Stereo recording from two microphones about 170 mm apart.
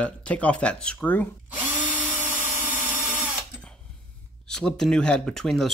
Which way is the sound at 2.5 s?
15° right (ahead or behind).